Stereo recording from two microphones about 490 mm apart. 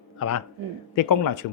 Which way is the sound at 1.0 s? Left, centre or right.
Left.